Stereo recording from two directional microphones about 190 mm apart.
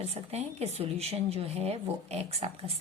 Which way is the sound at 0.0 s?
35° right (ahead or behind).